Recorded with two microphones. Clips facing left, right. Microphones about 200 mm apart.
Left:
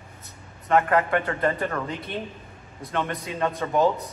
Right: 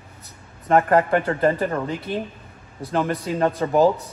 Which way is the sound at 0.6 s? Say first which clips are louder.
Right 4 dB; 35° right (ahead or behind).